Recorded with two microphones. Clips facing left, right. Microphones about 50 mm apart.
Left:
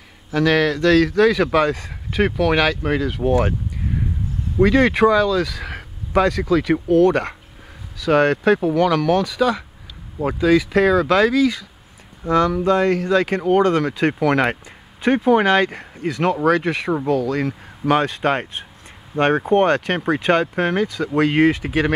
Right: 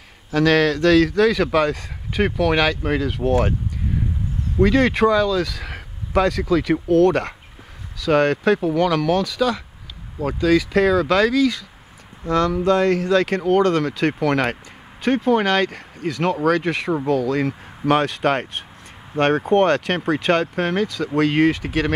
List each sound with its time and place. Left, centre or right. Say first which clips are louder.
0.3 s speech: right 1 dB; centre
4.6 s speech: left 2 dB; centre
18.0 s speech: even; centre